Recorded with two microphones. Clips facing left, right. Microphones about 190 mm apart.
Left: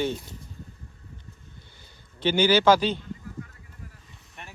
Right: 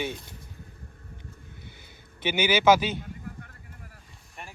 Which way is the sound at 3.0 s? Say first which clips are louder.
Left 2 dB; 60° right (ahead or behind).